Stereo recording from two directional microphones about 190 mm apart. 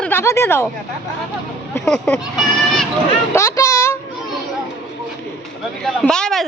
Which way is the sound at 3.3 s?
15° left (ahead or behind).